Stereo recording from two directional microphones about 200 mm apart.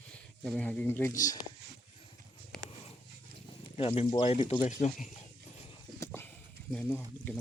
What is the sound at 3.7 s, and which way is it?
Speech, 30° left (ahead or behind).